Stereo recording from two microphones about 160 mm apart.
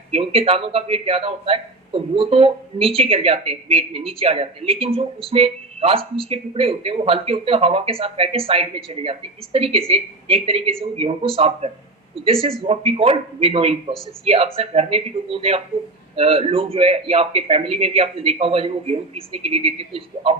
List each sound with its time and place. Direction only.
0.1 s a man's voice: 35° right (ahead or behind)